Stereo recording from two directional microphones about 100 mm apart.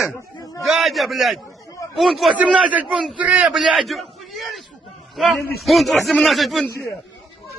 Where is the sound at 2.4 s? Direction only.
15° right (ahead or behind).